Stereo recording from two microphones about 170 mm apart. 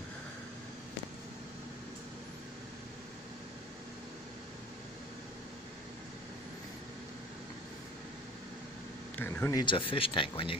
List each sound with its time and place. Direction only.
9.1 s speech: 15° left (ahead or behind); by 10.5 s 30° left (ahead or behind)